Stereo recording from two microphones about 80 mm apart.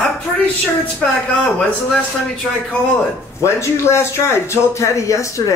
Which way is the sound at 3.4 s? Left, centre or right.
Left.